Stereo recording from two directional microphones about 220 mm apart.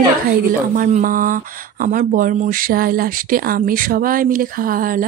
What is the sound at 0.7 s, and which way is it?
Speech, 35° right (ahead or behind).